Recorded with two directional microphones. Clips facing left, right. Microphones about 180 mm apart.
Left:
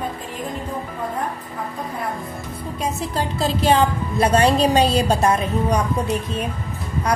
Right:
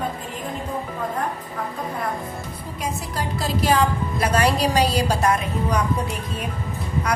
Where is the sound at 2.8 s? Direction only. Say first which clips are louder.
Left 3 dB; 25° left (ahead or behind).